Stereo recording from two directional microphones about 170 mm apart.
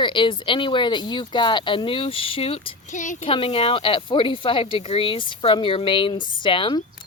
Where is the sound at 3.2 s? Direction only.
30° left (ahead or behind).